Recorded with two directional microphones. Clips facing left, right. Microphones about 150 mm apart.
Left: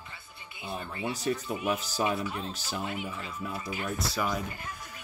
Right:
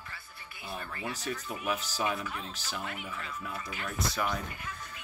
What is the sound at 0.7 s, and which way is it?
Speech, 25° left (ahead or behind).